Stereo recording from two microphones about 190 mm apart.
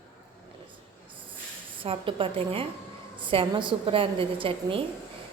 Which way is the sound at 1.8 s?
30° right (ahead or behind).